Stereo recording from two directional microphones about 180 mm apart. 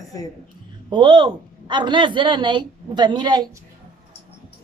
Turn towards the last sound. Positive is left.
turn(degrees=-25)  # may be behind; listen again after turning